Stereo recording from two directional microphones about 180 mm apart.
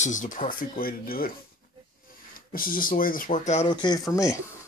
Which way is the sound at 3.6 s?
25° left (ahead or behind).